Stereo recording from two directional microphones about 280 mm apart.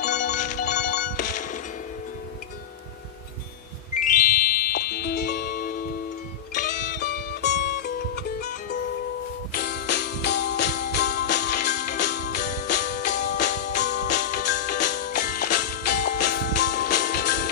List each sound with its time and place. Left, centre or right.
0.0 s music: left
4.0 s music: left
9.5 s music: left
14.5 s music: left